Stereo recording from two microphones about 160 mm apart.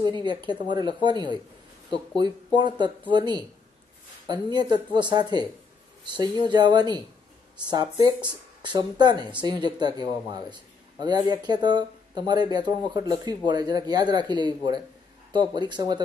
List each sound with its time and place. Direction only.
0.0 s a man's voice: 30° right (ahead or behind)